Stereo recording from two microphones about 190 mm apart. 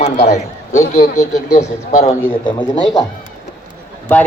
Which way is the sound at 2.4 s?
25° left (ahead or behind).